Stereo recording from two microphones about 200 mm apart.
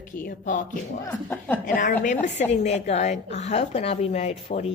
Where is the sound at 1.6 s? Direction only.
40° left (ahead or behind).